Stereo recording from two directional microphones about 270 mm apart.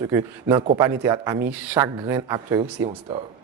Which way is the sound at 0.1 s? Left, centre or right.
Centre.